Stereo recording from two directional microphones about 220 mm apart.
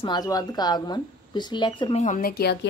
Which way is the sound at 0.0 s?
20° left (ahead or behind).